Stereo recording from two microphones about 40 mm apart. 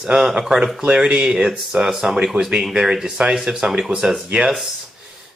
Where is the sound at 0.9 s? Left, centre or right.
Right.